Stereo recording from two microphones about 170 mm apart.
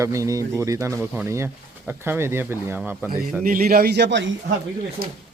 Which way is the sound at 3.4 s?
60° right (ahead or behind).